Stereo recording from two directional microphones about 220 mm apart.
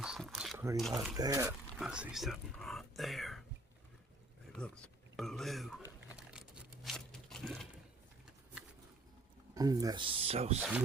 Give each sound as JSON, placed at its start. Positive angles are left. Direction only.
{"t": 0.0, "sound": "a sound", "side_deg": 0}
{"t": 0.8, "sound": "speech", "side_deg": 0}
{"t": 1.1, "sound": "speech", "side_deg": -15}
{"t": 1.8, "sound": "speech", "side_deg": -5}
{"t": 4.5, "sound": "speech", "side_deg": 5}
{"t": 6.8, "sound": "a sound", "side_deg": 0}
{"t": 9.6, "sound": "speech", "side_deg": -15}
{"t": 10.6, "sound": "speech", "side_deg": -5}